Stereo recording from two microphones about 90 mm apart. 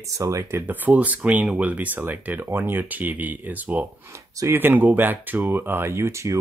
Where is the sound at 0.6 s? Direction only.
20° right (ahead or behind).